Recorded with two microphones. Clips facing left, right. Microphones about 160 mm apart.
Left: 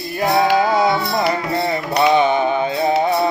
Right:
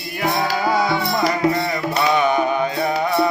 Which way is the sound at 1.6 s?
30° left (ahead or behind).